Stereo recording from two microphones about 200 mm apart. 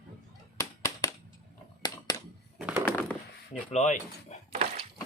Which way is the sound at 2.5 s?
5° right (ahead or behind).